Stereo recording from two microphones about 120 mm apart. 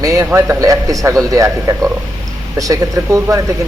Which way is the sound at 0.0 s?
25° right (ahead or behind).